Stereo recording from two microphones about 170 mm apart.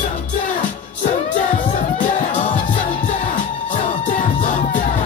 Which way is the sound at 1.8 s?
50° left (ahead or behind).